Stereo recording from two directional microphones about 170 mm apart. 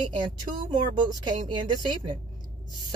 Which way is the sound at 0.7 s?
25° right (ahead or behind).